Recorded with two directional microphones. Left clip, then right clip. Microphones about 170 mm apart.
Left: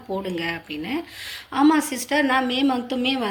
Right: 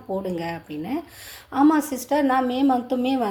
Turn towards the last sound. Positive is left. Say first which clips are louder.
# right 1 dB
turn(degrees=-40)  # may be behind; listen again after turning